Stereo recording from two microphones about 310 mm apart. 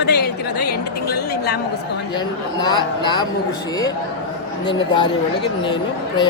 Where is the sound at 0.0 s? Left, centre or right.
Left.